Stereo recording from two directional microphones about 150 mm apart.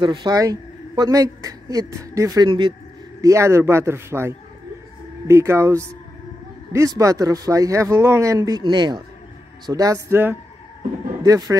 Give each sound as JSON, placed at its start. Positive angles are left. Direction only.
{"t": 0.0, "sound": "speech", "side_deg": -30}
{"t": 3.2, "sound": "a man's voice", "side_deg": -20}